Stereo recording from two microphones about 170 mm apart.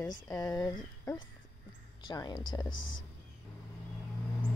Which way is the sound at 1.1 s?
20° left (ahead or behind).